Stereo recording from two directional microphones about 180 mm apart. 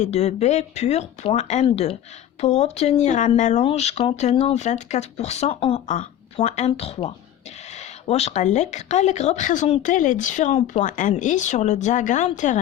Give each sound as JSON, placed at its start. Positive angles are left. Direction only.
{"t": 0.0, "sound": "speech", "side_deg": 40}
{"t": 5.9, "sound": "speech", "side_deg": 40}